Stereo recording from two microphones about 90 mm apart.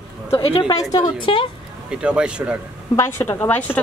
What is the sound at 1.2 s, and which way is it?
Speech, 75° left (ahead or behind).